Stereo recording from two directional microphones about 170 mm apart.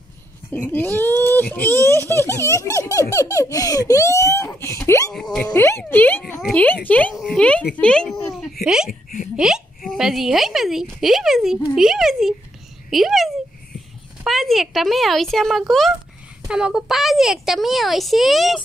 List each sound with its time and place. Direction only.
0.5 s speech: 10° left (ahead or behind)
5.1 s a woman's voice: 5° left (ahead or behind)
5.6 s a woman's voice: 15° left (ahead or behind)